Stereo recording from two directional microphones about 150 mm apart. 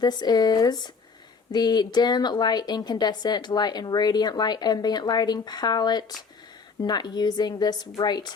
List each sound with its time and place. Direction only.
0.0 s a woman's voice: 25° left (ahead or behind)